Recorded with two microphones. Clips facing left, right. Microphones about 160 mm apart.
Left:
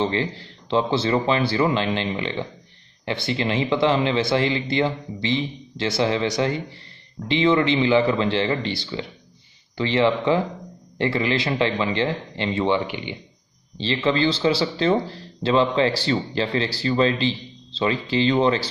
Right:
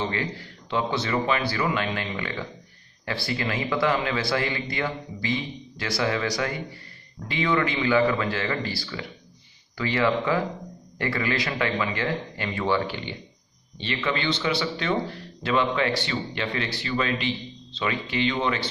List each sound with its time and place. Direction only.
0.0 s speech: 30° left (ahead or behind)
13.7 s speech: 30° left (ahead or behind)